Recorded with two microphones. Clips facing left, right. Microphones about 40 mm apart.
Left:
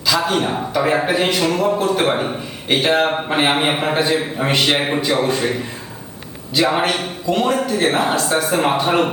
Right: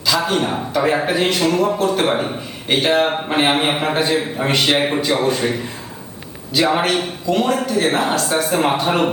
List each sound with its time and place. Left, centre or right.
0.0 s a man's voice: centre